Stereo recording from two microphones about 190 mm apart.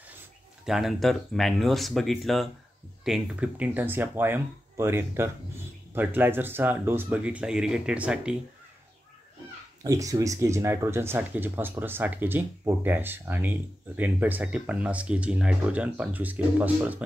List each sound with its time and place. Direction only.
0.7 s speech: centre (ahead or behind)
9.8 s speech: 20° right (ahead or behind)